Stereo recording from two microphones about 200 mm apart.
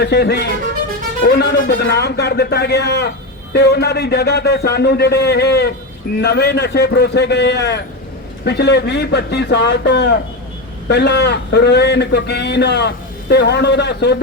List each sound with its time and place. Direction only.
0.0 s a man's voice: 55° left (ahead or behind)